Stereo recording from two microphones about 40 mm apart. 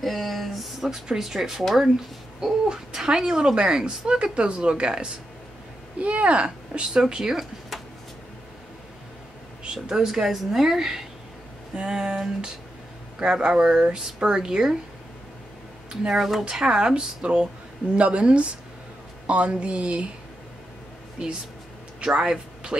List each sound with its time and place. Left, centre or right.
0.0 s speech: centre
9.7 s speech: centre
11.7 s speech: right
15.9 s speech: centre
17.9 s speech: right
22.0 s speech: right